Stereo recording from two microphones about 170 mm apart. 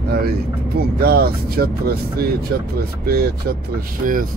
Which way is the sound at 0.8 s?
65° right (ahead or behind).